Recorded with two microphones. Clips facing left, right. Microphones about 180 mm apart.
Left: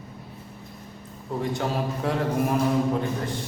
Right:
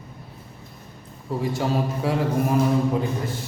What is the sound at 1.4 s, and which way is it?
A man's voice, 5° right (ahead or behind).